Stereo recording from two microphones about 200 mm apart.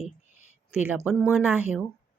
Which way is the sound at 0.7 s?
10° right (ahead or behind).